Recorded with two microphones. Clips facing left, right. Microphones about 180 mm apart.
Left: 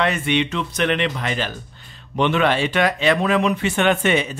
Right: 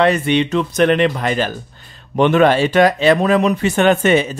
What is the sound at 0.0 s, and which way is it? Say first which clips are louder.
Speech: right 6 dB; 35° right (ahead or behind).